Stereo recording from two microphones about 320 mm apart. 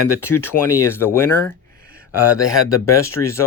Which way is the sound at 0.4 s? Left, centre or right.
Centre.